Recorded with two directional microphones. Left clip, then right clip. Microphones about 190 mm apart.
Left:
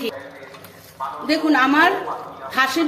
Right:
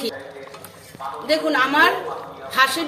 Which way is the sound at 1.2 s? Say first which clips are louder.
Left 1 dB; 45° left (ahead or behind).